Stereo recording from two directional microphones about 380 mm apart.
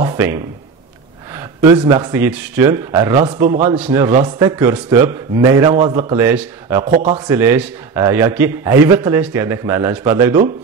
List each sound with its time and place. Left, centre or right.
0.0 s a sound: centre
2.0 s a man's voice: centre
3.4 s a man's voice: centre
3.7 s a man's voice: centre
6.8 s a man's voice: centre